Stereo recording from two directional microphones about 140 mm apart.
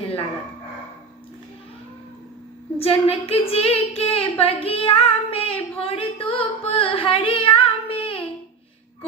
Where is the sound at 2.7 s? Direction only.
40° left (ahead or behind).